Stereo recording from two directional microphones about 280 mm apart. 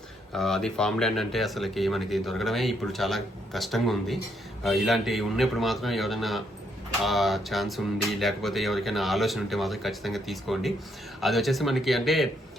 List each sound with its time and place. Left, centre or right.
0.3 s speech: centre